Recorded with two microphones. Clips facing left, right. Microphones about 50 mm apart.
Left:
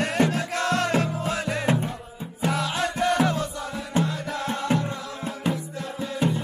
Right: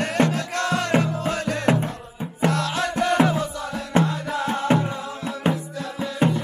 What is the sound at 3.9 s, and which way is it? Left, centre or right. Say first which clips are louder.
Music: right 4 dB; right.